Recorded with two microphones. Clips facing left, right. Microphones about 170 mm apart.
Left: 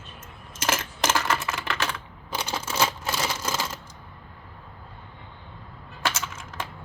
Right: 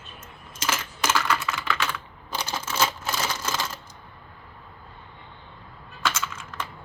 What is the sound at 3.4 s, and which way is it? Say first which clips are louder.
Typewriter: even; 10° left (ahead or behind).